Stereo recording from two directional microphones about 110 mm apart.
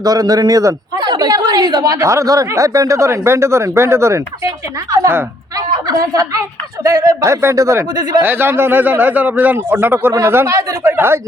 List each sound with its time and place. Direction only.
0.0 s a man's voice: 35° right (ahead or behind)
5.5 s a woman's voice: 35° right (ahead or behind)
8.2 s a man's voice: 20° right (ahead or behind)